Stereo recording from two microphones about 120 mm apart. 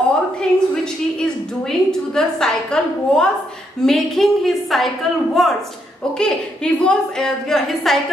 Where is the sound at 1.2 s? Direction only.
5° left (ahead or behind).